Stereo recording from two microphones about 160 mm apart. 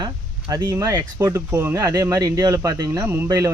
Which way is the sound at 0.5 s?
20° right (ahead or behind).